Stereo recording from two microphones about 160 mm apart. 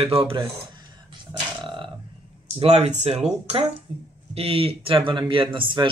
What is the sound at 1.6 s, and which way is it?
Burping, 30° right (ahead or behind).